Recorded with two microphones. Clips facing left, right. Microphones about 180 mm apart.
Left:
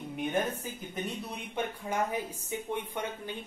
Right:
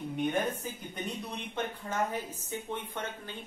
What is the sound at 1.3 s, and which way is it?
Speech, 10° left (ahead or behind).